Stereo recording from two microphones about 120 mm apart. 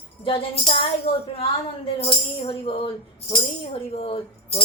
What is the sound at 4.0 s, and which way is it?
Speech, 55° left (ahead or behind).